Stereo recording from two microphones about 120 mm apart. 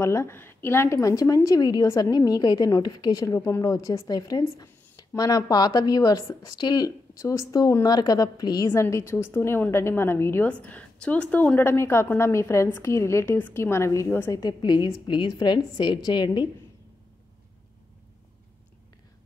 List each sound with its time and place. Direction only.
0.0 s a woman's voice: 25° left (ahead or behind)
3.3 s a woman's voice: 25° left (ahead or behind)
8.6 s a woman's voice: 20° left (ahead or behind)
14.4 s a woman's voice: 35° left (ahead or behind)